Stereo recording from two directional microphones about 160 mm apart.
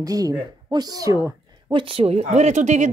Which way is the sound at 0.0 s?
20° right (ahead or behind).